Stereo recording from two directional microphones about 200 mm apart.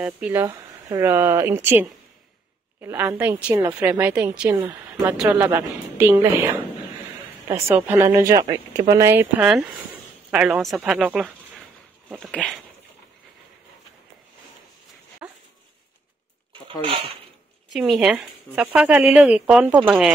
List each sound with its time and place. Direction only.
0.0 s a woman's voice: 10° right (ahead or behind)
15.2 s dog: 10° right (ahead or behind)
16.8 s speech: 25° right (ahead or behind)
17.7 s speech: centre (ahead or behind)